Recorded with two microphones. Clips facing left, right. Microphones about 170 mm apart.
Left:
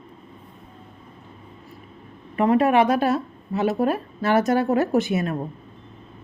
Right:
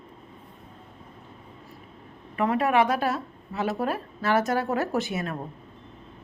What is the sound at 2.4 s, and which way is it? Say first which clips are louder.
A woman's voice: left 5 dB; 25° left (ahead or behind).